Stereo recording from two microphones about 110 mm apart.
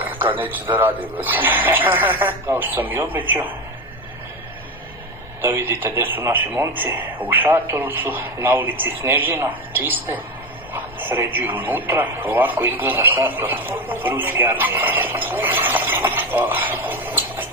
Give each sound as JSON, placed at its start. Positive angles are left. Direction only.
{"t": 0.0, "sound": "speech", "side_deg": -15}
{"t": 5.4, "sound": "speech", "side_deg": -20}